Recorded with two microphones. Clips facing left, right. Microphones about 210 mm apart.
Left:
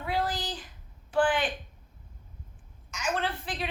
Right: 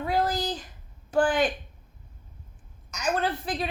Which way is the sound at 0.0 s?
40° right (ahead or behind).